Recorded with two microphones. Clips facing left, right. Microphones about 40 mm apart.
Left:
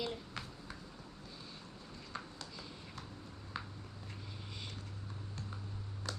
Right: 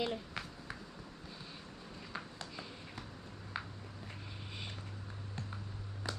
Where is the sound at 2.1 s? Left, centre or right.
Right.